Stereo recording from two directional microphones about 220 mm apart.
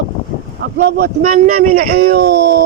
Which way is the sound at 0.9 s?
45° right (ahead or behind).